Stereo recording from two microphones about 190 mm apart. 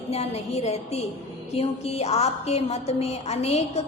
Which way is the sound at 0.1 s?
35° left (ahead or behind).